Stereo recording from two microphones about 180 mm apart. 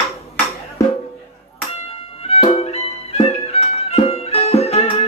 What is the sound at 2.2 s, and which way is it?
Music, 35° left (ahead or behind).